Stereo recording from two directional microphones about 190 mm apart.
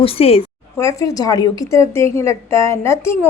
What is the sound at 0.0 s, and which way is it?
Speech, 30° left (ahead or behind).